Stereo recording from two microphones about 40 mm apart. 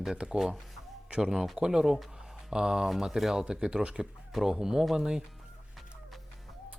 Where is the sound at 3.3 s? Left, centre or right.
Centre.